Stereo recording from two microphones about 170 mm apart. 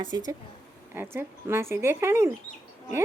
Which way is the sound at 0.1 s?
20° right (ahead or behind).